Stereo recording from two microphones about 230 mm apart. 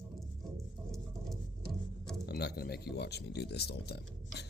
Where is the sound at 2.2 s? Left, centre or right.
Left.